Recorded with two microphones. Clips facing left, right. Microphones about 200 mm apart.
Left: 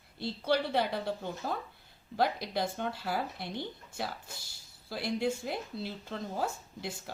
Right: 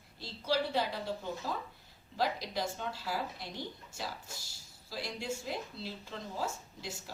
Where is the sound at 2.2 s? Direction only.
60° left (ahead or behind).